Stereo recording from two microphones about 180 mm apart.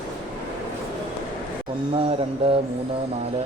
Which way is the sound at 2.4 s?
30° right (ahead or behind).